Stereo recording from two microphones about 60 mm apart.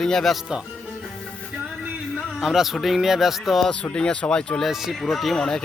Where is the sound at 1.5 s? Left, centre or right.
Centre.